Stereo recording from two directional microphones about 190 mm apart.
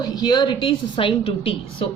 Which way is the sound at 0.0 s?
20° left (ahead or behind).